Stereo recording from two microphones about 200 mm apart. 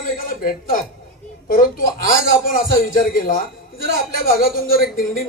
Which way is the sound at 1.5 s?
45° left (ahead or behind).